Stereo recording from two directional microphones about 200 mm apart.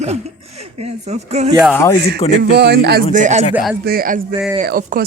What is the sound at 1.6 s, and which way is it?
Speech, 10° left (ahead or behind).